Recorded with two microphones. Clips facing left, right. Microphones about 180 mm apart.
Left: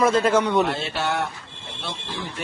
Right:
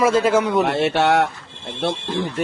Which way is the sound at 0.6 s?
70° right (ahead or behind).